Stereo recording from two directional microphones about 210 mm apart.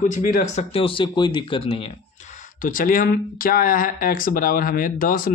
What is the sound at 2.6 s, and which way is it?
Speech, 40° left (ahead or behind).